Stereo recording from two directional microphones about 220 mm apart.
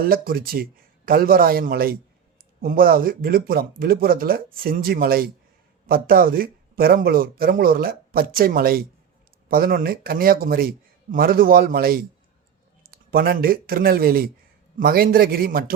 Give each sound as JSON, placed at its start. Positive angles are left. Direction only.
{"t": 0.0, "sound": "speech", "side_deg": -40}